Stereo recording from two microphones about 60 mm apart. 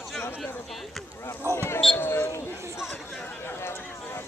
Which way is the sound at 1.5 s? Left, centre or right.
Left.